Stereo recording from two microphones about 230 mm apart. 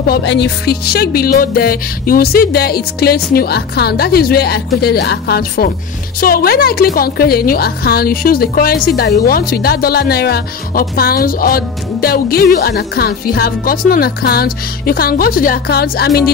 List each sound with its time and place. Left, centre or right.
0.1 s a woman's voice: left